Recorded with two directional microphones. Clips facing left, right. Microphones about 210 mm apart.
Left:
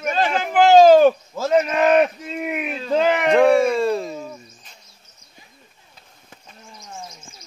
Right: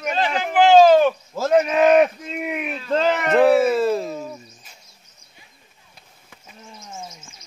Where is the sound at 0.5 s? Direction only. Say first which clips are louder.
Left 1 dB; 40° left (ahead or behind).